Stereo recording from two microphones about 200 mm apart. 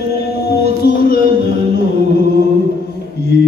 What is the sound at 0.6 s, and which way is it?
Music, 50° left (ahead or behind).